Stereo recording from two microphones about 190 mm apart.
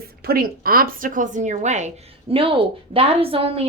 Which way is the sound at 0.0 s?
55° right (ahead or behind).